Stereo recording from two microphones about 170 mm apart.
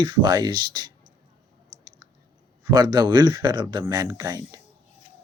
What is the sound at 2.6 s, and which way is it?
Speech, 25° right (ahead or behind).